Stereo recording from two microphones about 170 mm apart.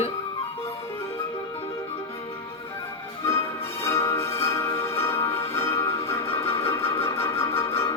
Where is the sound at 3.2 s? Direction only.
15° left (ahead or behind).